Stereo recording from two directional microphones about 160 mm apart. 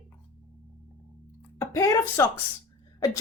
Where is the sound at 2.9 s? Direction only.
20° left (ahead or behind).